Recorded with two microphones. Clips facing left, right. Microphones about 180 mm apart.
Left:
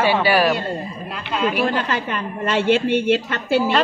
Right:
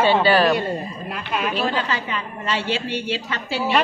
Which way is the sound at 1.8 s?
50° left (ahead or behind).